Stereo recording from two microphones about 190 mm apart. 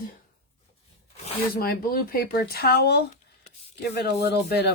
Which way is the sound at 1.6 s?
50° left (ahead or behind).